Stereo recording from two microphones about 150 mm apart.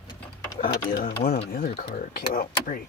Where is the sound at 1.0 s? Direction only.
85° left.